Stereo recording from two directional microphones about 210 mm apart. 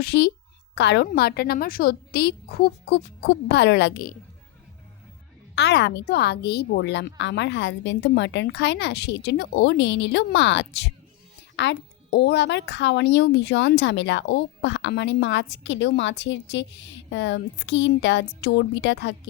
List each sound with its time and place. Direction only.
0.0 s a woman's voice: 50° left (ahead or behind)
5.5 s speech: 55° left (ahead or behind)